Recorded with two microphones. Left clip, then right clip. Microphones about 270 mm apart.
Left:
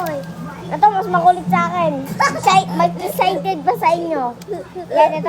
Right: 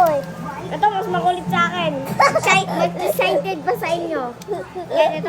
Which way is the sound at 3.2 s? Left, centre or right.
Centre.